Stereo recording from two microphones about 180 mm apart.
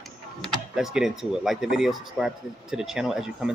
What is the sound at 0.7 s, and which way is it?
Speech, 5° right (ahead or behind).